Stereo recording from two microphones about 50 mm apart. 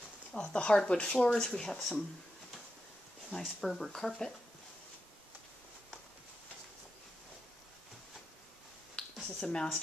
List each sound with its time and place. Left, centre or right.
0.3 s speech: centre
3.3 s speech: centre
8.9 s a sound: centre